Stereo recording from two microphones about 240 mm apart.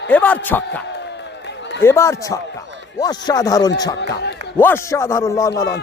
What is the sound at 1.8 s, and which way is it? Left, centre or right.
Speech, centre.